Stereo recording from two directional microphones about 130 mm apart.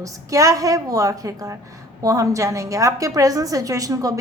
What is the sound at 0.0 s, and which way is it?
A woman's voice, 25° right (ahead or behind).